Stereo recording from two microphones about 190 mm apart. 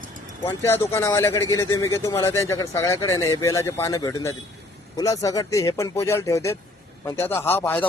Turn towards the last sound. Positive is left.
turn(degrees=10)  # may be behind; listen again after turning